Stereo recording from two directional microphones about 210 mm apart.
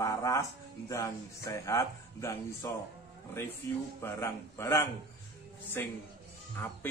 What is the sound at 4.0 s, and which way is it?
Speech, 10° left (ahead or behind).